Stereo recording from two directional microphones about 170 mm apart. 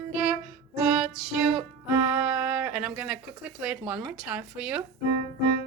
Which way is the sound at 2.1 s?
10° right (ahead or behind).